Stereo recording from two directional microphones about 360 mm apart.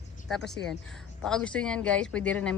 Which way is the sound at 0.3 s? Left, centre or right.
Centre.